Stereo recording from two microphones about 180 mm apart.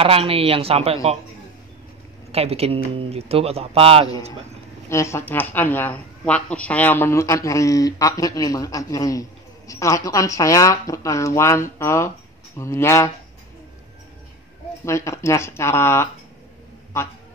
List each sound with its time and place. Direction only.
0.0 s speech: 30° right (ahead or behind)
2.3 s speech: 35° right (ahead or behind)
4.8 s speech: 15° left (ahead or behind)
14.9 s speech: 15° left (ahead or behind)